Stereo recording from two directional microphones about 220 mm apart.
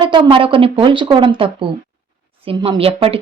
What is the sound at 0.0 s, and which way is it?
Speech, 20° right (ahead or behind).